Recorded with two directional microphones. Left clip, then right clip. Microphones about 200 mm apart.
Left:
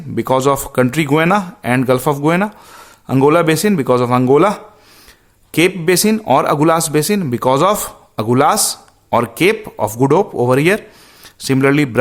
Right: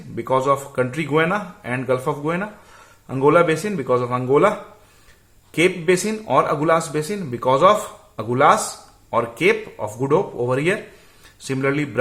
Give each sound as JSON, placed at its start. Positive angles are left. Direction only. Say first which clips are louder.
{"t": 0.2, "sound": "a man's voice", "louder": "left 5 dB", "side_deg": 55}